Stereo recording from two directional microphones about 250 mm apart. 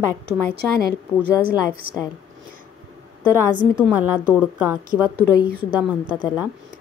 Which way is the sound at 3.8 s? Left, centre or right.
Centre.